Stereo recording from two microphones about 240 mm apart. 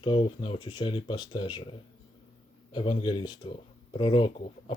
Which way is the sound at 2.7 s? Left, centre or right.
Centre.